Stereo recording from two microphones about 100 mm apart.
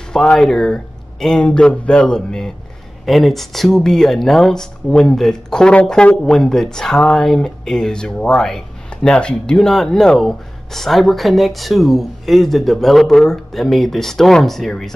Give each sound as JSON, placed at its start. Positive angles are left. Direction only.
{"t": 0.1, "sound": "speech", "side_deg": 5}